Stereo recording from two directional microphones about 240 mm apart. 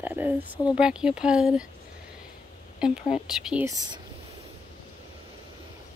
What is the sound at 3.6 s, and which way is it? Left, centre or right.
Speech, centre.